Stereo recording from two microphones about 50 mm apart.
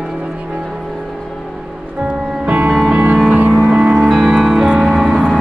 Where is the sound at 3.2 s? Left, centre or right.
Right.